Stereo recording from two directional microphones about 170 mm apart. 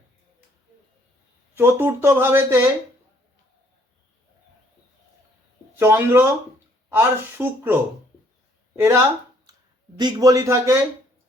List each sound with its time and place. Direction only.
1.5 s speech: 10° right (ahead or behind)
5.8 s speech: 15° right (ahead or behind)